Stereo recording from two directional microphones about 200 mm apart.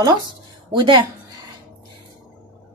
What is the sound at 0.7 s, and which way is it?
Speech, 25° right (ahead or behind).